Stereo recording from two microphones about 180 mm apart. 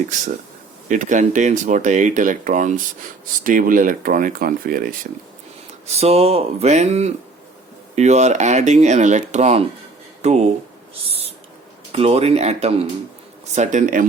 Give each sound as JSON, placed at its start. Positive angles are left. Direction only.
{"t": 0.9, "sound": "speech", "side_deg": -45}
{"t": 5.9, "sound": "speech", "side_deg": -35}
{"t": 11.9, "sound": "speech", "side_deg": -35}